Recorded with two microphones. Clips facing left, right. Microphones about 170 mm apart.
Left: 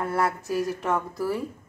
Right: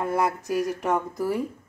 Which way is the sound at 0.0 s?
15° right (ahead or behind).